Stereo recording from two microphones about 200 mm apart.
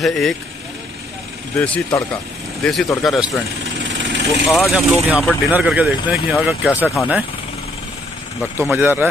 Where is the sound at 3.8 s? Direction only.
65° right (ahead or behind).